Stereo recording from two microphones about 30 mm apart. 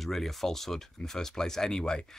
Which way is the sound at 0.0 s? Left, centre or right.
Centre.